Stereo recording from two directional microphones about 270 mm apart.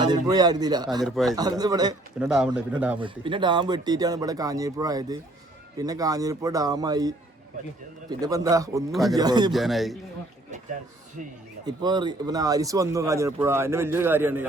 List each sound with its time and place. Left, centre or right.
0.0 s speech: centre
1.0 s a man's voice: centre
1.4 s speech: centre
2.1 s a man's voice: centre
3.0 s speech: centre
8.2 s speech: centre
8.9 s a man's voice: centre
9.1 s speech: centre
9.5 s a man's voice: centre
11.2 s speech: right
11.6 s speech: centre